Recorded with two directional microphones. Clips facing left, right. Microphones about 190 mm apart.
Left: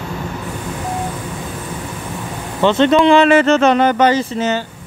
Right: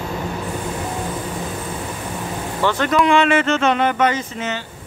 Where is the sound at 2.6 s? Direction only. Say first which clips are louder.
Left 6 dB; 25° left (ahead or behind).